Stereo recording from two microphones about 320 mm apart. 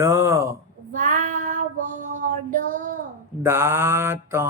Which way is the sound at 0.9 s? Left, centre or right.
Right.